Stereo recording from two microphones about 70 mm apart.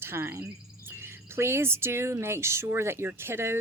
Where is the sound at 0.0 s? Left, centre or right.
Right.